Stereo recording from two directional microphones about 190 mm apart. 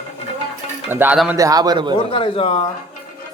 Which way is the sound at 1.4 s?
20° right (ahead or behind).